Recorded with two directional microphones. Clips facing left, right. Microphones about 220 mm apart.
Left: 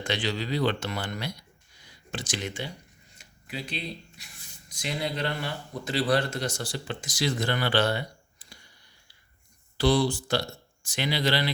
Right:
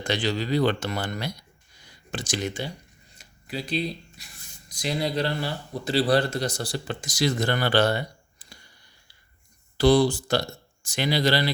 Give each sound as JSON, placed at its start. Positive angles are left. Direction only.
{"t": 0.0, "sound": "speech", "side_deg": -40}
{"t": 3.2, "sound": "a sound", "side_deg": -35}
{"t": 4.7, "sound": "speech", "side_deg": -35}
{"t": 9.7, "sound": "speech", "side_deg": -45}